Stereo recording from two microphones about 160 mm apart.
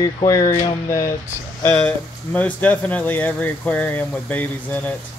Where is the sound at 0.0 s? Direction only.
20° left (ahead or behind).